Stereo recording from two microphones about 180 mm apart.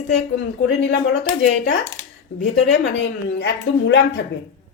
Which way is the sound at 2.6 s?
80° left.